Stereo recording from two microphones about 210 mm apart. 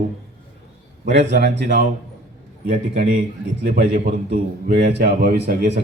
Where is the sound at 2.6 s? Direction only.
40° right (ahead or behind).